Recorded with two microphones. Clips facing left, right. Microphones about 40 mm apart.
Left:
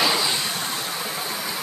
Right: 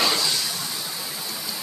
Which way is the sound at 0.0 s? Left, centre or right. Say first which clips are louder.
Left 2 dB; centre.